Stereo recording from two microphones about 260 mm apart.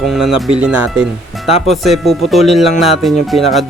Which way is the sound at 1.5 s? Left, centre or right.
Left.